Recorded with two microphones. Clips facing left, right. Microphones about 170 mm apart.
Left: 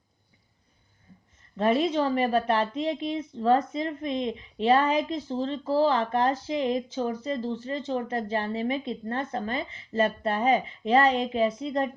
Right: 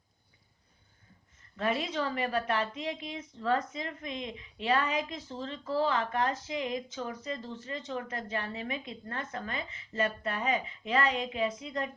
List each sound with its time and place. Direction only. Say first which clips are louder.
1.5 s a woman's voice: left 8 dB; 25° left (ahead or behind)